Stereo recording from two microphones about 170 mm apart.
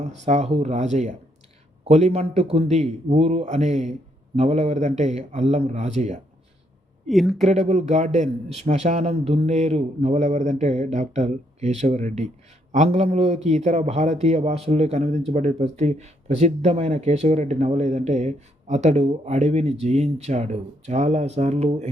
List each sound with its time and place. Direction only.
0.3 s a man's voice: 40° right (ahead or behind)
7.1 s speech: centre (ahead or behind)
7.4 s a man's voice: 40° right (ahead or behind)